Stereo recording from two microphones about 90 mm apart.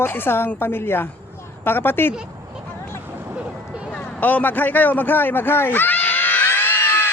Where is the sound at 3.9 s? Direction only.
15° left (ahead or behind).